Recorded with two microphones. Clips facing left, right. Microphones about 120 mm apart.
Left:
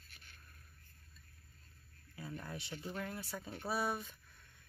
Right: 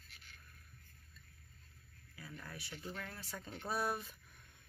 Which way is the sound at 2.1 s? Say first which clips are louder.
Left 5 dB; 30° left (ahead or behind).